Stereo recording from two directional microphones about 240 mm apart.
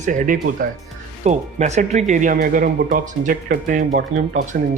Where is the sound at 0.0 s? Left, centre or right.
Right.